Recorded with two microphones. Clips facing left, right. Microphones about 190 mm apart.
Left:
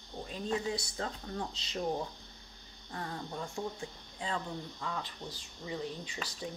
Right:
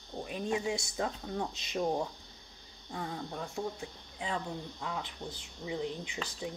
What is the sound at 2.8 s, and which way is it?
Speech, 10° right (ahead or behind).